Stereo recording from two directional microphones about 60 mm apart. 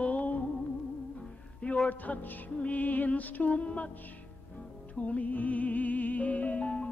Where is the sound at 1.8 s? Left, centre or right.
Left.